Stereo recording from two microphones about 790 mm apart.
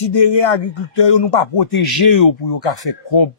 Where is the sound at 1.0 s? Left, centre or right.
Left.